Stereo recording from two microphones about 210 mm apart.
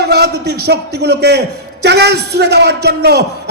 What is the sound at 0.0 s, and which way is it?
A man's voice, 50° right (ahead or behind).